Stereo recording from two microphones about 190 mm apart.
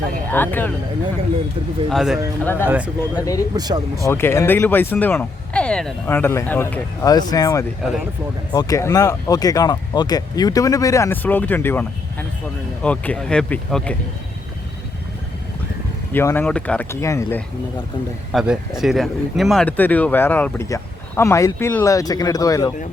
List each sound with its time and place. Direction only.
0.3 s speech: 10° left (ahead or behind)
1.9 s speech: centre (ahead or behind)
2.4 s speech: 10° left (ahead or behind)
2.6 s speech: 5° right (ahead or behind)
3.2 s speech: 20° left (ahead or behind)
3.5 s speech: 20° right (ahead or behind)
4.0 s speech: 15° left (ahead or behind)
16.1 s speech: 10° left (ahead or behind)
18.3 s speech: centre (ahead or behind); by 22.7 s 20° left (ahead or behind)